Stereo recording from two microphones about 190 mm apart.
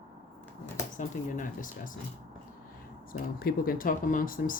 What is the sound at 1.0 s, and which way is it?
Speech, 45° left (ahead or behind).